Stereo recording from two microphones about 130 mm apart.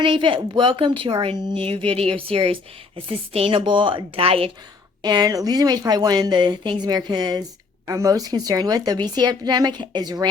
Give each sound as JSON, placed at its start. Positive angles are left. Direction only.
{"t": 0.0, "sound": "a woman's voice", "side_deg": -40}
{"t": 5.0, "sound": "speech", "side_deg": -30}